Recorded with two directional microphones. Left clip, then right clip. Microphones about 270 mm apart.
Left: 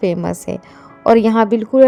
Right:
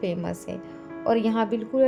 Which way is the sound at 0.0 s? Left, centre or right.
Left.